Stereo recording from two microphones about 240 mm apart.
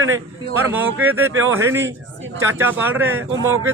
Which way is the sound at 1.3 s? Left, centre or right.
Right.